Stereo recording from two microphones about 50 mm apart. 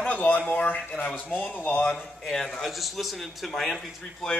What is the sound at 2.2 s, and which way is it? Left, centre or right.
A man's voice, centre.